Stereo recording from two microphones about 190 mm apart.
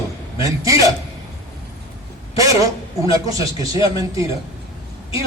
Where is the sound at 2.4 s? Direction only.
20° right (ahead or behind).